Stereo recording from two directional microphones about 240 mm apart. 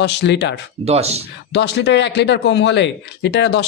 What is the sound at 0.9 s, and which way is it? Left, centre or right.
Speech, right.